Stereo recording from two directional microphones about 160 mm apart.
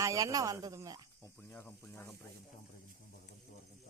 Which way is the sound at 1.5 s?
10° left (ahead or behind).